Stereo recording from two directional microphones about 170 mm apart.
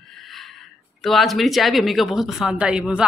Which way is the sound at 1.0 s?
Centre (ahead or behind).